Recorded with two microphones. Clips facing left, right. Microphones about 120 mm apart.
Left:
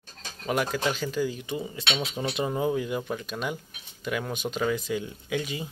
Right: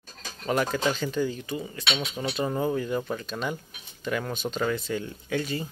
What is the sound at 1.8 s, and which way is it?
Speech, 20° left (ahead or behind).